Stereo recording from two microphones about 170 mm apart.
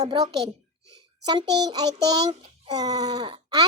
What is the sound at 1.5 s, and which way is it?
A child's voice, 25° right (ahead or behind).